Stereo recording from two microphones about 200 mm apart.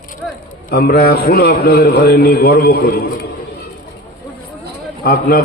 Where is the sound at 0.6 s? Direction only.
50° left (ahead or behind).